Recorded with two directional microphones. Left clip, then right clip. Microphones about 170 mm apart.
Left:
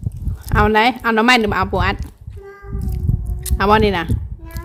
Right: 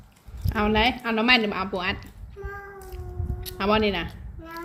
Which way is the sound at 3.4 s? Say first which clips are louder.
Left 9 dB; 45° left (ahead or behind).